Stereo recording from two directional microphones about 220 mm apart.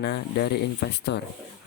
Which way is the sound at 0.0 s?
45° left (ahead or behind).